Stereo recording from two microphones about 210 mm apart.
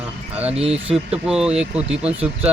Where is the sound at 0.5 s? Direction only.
30° right (ahead or behind).